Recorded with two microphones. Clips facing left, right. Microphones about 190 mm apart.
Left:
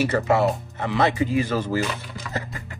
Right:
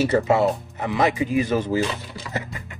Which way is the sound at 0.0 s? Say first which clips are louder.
Right 2 dB; 20° right (ahead or behind).